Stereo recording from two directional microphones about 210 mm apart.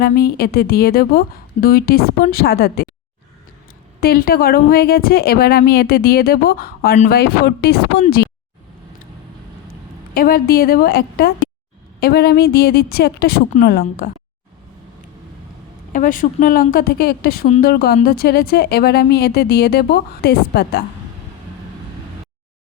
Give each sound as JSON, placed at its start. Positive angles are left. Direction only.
{"t": 0.0, "sound": "a woman's voice", "side_deg": 45}
{"t": 4.0, "sound": "a woman's voice", "side_deg": 45}
{"t": 10.2, "sound": "a woman's voice", "side_deg": 45}
{"t": 15.9, "sound": "a woman's voice", "side_deg": 40}